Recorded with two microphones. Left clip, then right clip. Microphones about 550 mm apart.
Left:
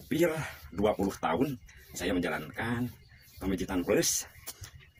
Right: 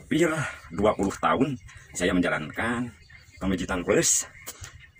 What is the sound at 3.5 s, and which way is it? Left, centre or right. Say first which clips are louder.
Speech: right 5 dB; left.